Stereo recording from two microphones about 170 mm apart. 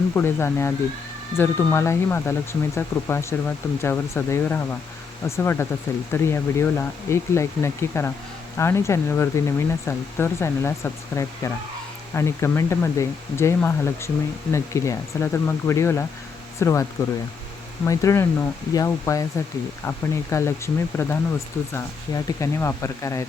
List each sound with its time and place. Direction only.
0.1 s speech: 15° left (ahead or behind)
17.8 s speech: 20° left (ahead or behind)